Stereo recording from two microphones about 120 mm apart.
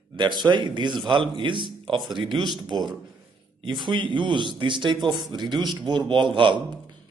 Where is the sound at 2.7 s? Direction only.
40° right (ahead or behind).